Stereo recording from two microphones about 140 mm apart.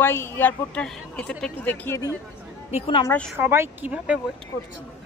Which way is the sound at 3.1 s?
5° left (ahead or behind).